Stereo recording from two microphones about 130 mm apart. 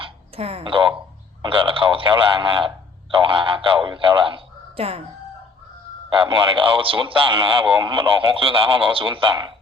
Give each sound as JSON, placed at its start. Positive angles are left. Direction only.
{"t": 0.0, "sound": "a sound", "side_deg": -50}
{"t": 1.4, "sound": "speech", "side_deg": -40}
{"t": 6.1, "sound": "speech", "side_deg": -40}